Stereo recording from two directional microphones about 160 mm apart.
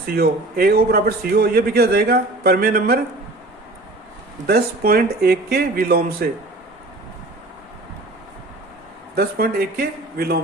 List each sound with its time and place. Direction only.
0.2 s a man's voice: 75° right (ahead or behind)
4.4 s a man's voice: 75° right (ahead or behind)
9.1 s a man's voice: 75° right (ahead or behind)